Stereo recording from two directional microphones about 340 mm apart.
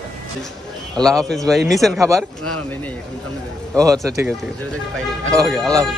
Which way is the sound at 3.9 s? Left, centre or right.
Centre.